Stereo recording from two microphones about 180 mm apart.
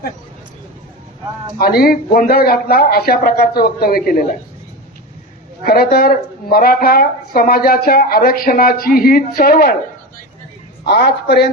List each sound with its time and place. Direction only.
1.5 s speech: 55° left (ahead or behind)
5.6 s speech: 55° left (ahead or behind)
10.8 s speech: 65° left (ahead or behind)